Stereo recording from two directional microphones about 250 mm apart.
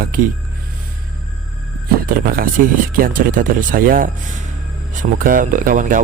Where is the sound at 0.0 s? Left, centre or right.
Right.